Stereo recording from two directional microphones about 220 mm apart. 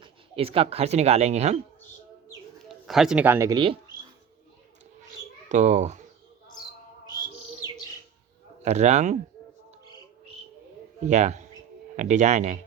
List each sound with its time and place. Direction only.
0.0 s speech: 25° right (ahead or behind)
2.6 s speech: centre (ahead or behind); by 3.8 s 20° right (ahead or behind)
5.5 s speech: 35° right (ahead or behind)
8.6 s speech: 30° right (ahead or behind)
11.0 s speech: 30° right (ahead or behind)